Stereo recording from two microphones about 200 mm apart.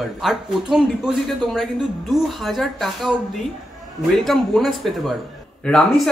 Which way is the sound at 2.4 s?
Centre (ahead or behind).